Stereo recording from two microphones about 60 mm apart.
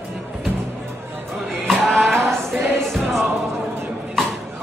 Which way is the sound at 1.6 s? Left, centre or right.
Centre.